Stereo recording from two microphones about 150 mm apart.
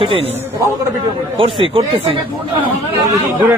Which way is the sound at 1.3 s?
35° right (ahead or behind).